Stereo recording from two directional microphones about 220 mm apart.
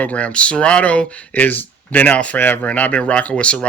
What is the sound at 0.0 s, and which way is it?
Speech, 5° left (ahead or behind).